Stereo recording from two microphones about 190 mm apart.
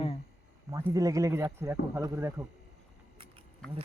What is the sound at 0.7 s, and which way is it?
Speech, 15° right (ahead or behind).